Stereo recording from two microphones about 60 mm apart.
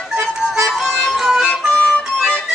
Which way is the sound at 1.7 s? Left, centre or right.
Centre.